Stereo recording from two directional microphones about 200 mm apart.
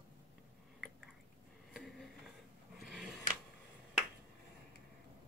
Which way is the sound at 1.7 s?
Centre (ahead or behind).